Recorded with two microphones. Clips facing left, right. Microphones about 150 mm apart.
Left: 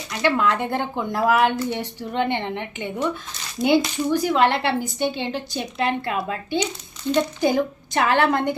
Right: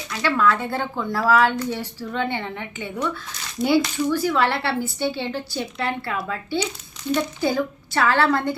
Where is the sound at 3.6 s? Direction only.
20° left (ahead or behind).